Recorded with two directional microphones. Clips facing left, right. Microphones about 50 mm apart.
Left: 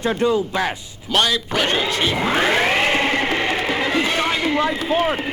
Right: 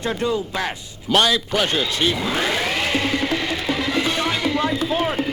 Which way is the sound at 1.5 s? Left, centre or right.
Left.